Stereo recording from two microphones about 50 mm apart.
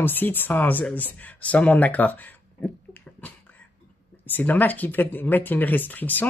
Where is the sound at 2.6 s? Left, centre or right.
Left.